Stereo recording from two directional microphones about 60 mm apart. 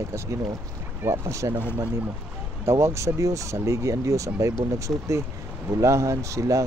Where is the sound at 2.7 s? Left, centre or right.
Right.